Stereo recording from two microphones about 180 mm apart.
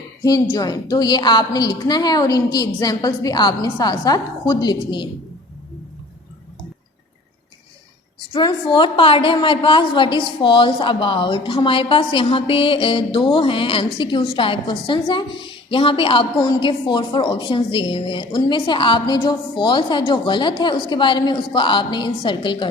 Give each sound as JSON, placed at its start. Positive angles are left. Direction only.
{"t": 0.2, "sound": "a woman's voice", "side_deg": 20}
{"t": 8.3, "sound": "a woman's voice", "side_deg": 25}